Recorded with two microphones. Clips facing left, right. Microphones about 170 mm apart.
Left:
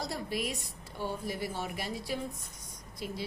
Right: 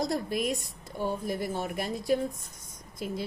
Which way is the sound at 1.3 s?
50° right (ahead or behind).